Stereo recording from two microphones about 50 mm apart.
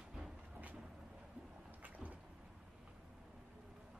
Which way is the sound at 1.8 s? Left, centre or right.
Right.